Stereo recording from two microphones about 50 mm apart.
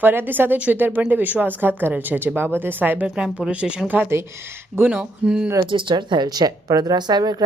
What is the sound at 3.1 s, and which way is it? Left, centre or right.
Speech, centre.